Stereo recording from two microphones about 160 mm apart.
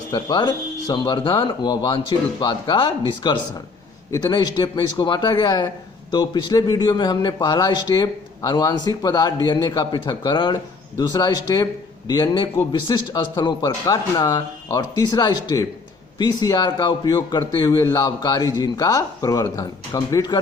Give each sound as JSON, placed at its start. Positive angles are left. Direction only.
{"t": 0.1, "sound": "speech", "side_deg": 25}